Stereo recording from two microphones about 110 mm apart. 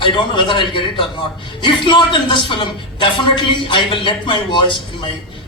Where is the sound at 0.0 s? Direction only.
45° left (ahead or behind).